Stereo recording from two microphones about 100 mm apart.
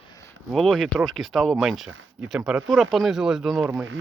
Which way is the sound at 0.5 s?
5° left (ahead or behind).